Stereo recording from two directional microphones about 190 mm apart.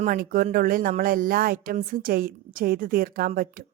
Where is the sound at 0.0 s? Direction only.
45° right (ahead or behind).